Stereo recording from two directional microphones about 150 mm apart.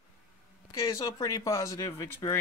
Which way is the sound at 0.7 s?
20° left (ahead or behind).